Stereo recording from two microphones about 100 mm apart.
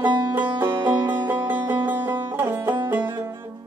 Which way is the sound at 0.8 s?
40° right (ahead or behind).